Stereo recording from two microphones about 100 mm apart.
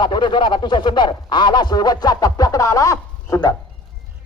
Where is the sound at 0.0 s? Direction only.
50° left (ahead or behind); by 3.5 s 35° left (ahead or behind).